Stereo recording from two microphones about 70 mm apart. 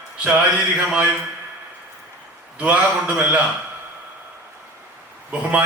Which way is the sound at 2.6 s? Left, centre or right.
Centre.